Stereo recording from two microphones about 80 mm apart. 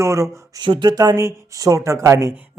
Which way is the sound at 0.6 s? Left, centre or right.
Right.